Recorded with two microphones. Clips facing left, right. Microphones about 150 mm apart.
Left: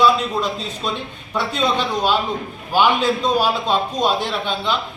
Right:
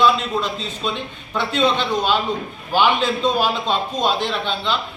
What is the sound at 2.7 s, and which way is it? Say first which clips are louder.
A man's voice: left 1 dB; 10° left (ahead or behind).